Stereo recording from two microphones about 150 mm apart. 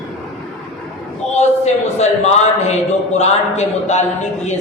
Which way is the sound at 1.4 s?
50° left (ahead or behind).